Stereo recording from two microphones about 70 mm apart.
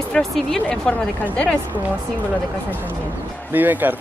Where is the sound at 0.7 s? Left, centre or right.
Centre.